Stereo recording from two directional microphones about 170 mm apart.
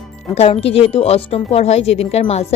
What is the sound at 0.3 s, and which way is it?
Speech, 40° left (ahead or behind).